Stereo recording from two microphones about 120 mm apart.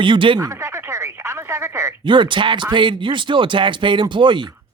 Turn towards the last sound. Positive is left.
turn(degrees=-40)  # may be behind; listen again after turning